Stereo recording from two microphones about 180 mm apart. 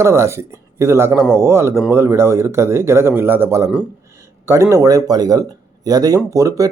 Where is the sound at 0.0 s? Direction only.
15° right (ahead or behind).